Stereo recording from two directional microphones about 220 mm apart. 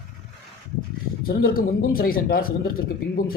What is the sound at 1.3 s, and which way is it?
Speech, 45° left (ahead or behind).